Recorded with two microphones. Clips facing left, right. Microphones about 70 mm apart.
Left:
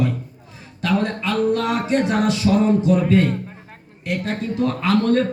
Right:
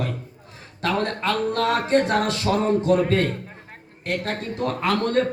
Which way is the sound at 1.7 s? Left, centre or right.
Right.